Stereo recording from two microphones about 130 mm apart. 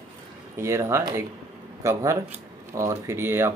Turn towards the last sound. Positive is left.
turn(degrees=-20)  # may be behind; listen again after turning